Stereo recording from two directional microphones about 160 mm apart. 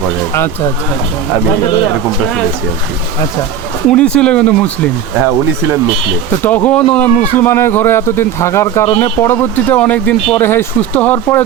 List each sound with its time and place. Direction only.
0.3 s speech: 15° left (ahead or behind)
3.8 s speech: 5° left (ahead or behind)
6.3 s speech: 15° left (ahead or behind)